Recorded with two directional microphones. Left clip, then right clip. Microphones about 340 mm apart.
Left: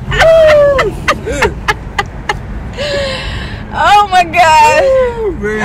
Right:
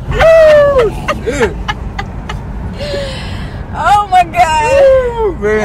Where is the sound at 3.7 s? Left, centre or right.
Left.